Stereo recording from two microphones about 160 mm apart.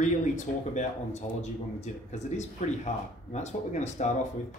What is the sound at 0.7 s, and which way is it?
Speech, 45° left (ahead or behind).